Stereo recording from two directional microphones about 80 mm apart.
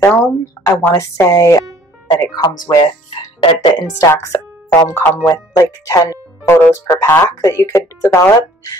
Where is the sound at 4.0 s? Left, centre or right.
Left.